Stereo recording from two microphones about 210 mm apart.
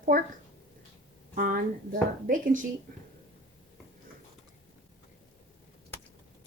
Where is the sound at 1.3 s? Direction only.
40° right (ahead or behind).